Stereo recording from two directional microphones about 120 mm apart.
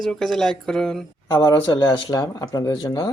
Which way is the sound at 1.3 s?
35° left (ahead or behind).